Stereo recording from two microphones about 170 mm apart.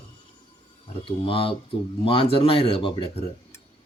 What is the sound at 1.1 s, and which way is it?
Speech, 30° left (ahead or behind).